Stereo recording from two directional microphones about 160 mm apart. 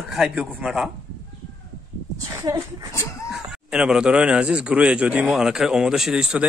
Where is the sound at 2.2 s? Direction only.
20° right (ahead or behind).